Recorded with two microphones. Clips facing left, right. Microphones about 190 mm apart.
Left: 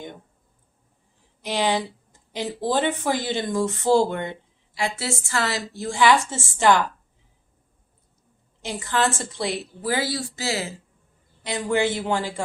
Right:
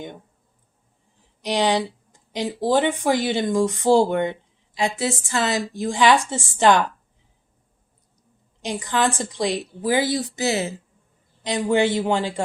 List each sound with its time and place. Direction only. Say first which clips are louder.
1.4 s a woman's voice: right 3 dB; 15° right (ahead or behind)
8.6 s a woman's voice: right 2 dB; 15° right (ahead or behind)